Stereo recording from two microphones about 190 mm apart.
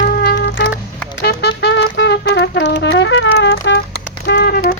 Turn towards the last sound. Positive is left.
turn(degrees=55)  # may be behind; listen again after turning